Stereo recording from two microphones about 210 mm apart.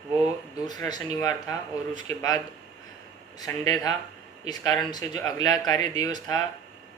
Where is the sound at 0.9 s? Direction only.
15° left (ahead or behind).